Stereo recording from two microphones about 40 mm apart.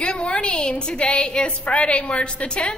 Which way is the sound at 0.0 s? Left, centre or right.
Left.